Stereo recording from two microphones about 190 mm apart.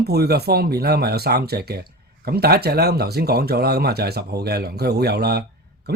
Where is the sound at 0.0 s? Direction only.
55° right (ahead or behind).